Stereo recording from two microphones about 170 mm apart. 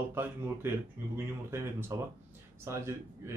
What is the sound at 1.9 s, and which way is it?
Speech, 20° right (ahead or behind).